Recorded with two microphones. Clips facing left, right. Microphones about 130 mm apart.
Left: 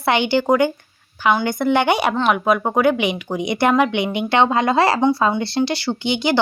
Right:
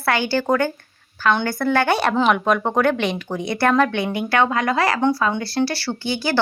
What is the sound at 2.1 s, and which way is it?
A woman's voice, 5° left (ahead or behind).